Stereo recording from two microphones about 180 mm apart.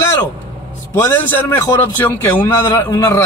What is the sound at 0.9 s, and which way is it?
Speech, 15° left (ahead or behind).